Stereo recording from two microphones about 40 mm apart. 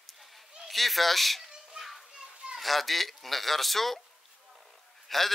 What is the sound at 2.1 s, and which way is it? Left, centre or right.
Children playing, right.